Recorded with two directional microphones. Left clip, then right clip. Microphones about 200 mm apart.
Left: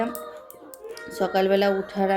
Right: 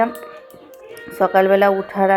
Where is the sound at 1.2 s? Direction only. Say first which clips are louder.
Right 9 dB; 5° right (ahead or behind).